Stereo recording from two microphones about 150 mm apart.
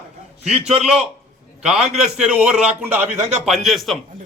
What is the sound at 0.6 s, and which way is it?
Speech, 45° right (ahead or behind).